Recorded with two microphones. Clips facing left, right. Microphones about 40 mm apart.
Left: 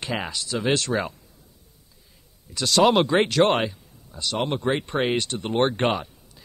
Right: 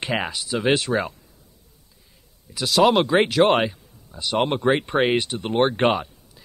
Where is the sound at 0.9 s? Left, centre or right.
Centre.